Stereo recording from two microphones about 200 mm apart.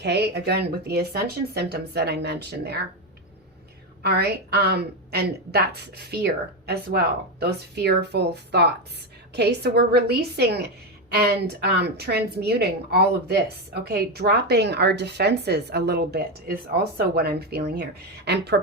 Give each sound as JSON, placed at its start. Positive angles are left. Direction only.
{"t": 0.0, "sound": "speech", "side_deg": -55}
{"t": 4.0, "sound": "a woman's voice", "side_deg": -55}